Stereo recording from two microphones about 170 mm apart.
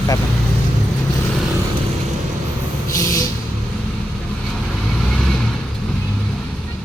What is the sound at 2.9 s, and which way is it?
Speech, 20° left (ahead or behind).